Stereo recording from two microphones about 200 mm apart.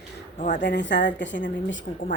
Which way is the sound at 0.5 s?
60° left (ahead or behind).